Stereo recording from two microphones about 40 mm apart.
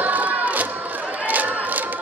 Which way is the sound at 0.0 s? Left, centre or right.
Right.